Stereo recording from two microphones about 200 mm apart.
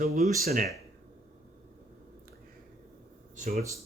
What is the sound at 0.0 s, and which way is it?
Speech, 45° right (ahead or behind).